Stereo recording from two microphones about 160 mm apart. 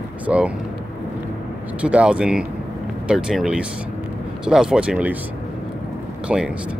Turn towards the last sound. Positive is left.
turn(degrees=-5)  # may be behind; listen again after turning